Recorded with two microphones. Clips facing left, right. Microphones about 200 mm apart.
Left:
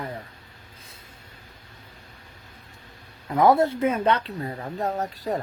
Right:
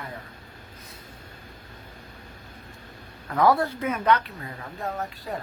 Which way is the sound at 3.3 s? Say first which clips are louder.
Left 3 dB; 20° left (ahead or behind).